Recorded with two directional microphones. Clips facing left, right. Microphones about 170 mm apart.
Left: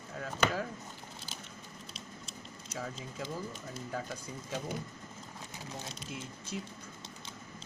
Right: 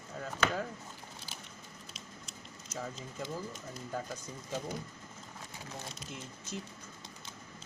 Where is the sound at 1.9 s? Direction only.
30° left (ahead or behind).